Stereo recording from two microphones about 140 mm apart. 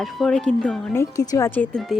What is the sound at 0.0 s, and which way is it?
Speech, centre (ahead or behind).